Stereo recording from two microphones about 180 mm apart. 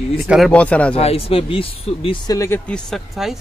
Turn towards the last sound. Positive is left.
turn(degrees=0)  # may be behind; listen again after turning